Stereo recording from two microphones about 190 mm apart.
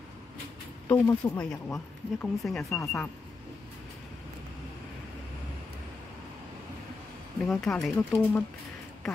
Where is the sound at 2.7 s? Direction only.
15° left (ahead or behind).